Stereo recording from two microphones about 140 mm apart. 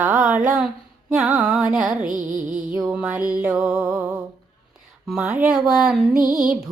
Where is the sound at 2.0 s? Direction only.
70° right (ahead or behind).